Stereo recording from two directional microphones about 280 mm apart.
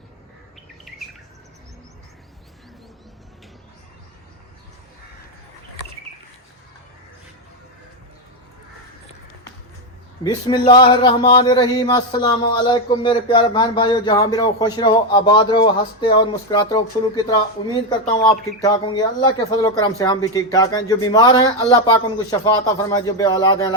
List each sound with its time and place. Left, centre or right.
0.9 s bird: centre
10.2 s a man's voice: centre